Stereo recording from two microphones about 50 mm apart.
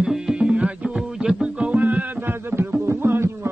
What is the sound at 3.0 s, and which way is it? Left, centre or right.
Music, right.